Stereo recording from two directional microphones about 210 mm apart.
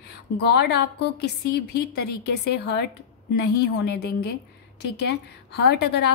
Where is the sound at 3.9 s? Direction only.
50° left (ahead or behind).